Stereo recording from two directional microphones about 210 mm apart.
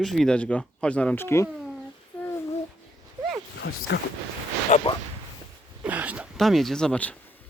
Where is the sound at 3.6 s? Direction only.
60° left (ahead or behind).